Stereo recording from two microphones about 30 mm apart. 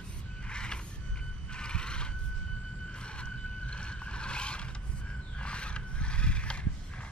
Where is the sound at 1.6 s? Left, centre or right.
Left.